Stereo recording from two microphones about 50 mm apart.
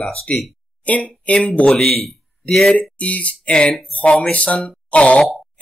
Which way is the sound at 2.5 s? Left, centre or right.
Centre.